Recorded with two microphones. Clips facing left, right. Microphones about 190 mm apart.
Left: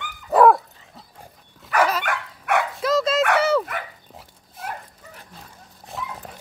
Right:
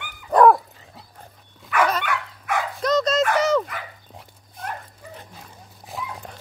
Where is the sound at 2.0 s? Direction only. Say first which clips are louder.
Left 2 dB; 65° left (ahead or behind).